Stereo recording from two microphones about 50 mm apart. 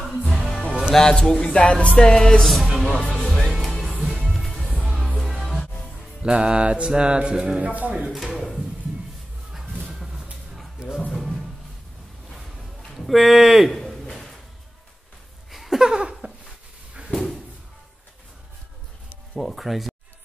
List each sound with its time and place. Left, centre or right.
0.3 s music: centre
2.4 s music: centre
4.6 s music: centre
4.8 s music: centre
5.1 s music: centre
6.2 s music: centre
7.6 s speech: right
8.0 s speech: centre
11.0 s music: centre
12.9 s a sound: centre
15.5 s a sound: centre
19.3 s speech: centre